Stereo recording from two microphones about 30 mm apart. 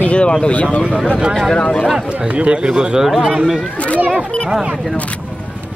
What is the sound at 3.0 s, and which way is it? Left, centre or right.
Speech, centre.